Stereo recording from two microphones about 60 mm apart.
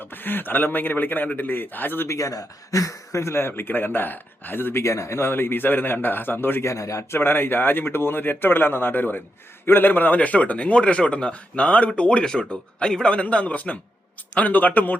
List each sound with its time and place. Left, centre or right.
0.0 s speech: left
2.0 s speech: left
4.8 s speech: left
6.7 s a man's voice: left
7.1 s speech: left